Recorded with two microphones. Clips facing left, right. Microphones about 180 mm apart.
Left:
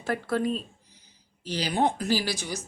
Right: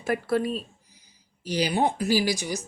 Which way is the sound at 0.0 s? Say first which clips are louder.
Right 2 dB; 10° right (ahead or behind).